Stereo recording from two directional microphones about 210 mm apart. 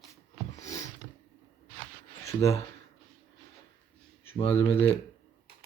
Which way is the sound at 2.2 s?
15° left (ahead or behind).